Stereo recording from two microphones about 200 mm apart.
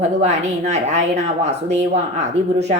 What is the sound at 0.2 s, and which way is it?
A woman's voice, 35° right (ahead or behind).